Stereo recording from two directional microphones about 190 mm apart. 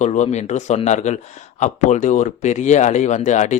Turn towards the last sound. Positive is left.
turn(degrees=40)  # may be behind; listen again after turning